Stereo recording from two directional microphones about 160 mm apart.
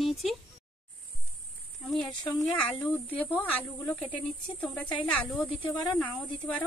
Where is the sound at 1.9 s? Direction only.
5° left (ahead or behind).